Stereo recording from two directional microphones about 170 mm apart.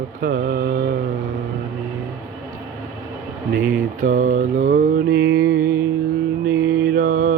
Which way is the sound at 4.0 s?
50° right (ahead or behind).